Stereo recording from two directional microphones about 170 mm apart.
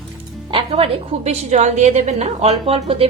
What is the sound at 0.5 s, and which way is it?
A woman's voice, 35° right (ahead or behind).